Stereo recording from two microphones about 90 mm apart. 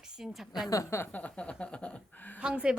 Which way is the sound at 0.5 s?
45° left (ahead or behind).